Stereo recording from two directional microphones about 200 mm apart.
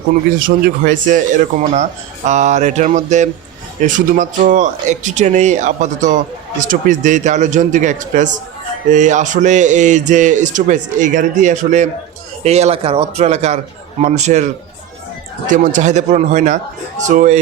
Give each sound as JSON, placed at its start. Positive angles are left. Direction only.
{"t": 0.3, "sound": "speech", "side_deg": -45}